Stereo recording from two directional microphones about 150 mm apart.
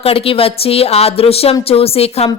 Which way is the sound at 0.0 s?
40° left (ahead or behind).